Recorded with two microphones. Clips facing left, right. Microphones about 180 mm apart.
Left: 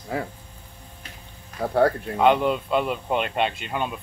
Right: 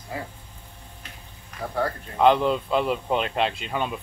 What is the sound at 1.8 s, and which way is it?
Speech, 70° left (ahead or behind).